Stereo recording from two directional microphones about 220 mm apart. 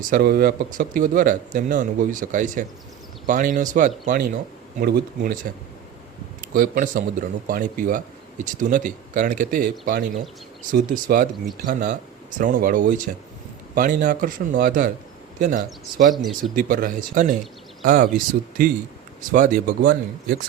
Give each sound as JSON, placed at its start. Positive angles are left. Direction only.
{"t": 0.0, "sound": "speech", "side_deg": -40}
{"t": 19.3, "sound": "speech", "side_deg": -40}